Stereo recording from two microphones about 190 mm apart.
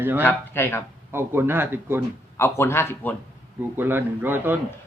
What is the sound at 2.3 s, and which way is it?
Speech, 15° left (ahead or behind).